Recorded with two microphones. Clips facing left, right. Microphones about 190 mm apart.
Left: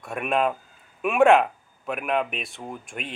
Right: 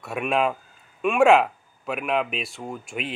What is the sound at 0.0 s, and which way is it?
Speech, centre (ahead or behind).